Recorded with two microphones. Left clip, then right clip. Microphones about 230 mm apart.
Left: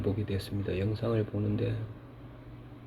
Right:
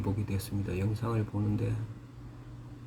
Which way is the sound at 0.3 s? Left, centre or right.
Centre.